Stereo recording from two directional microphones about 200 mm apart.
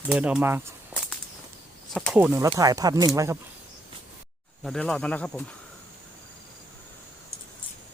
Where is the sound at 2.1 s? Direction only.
10° right (ahead or behind).